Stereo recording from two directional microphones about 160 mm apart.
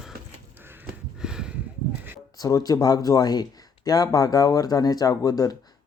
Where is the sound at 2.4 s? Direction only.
20° left (ahead or behind).